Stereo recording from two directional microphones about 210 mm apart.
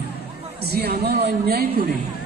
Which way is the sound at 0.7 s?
50° right (ahead or behind).